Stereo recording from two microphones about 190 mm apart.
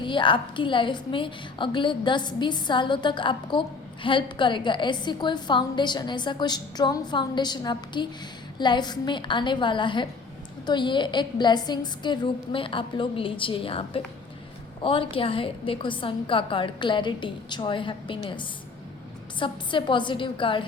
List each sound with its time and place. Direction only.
0.0 s a woman's voice: 25° left (ahead or behind)